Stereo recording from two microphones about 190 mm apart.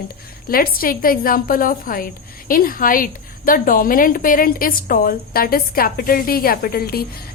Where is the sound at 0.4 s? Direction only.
50° left (ahead or behind).